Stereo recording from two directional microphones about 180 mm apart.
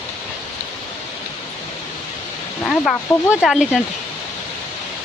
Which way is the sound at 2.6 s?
Centre (ahead or behind).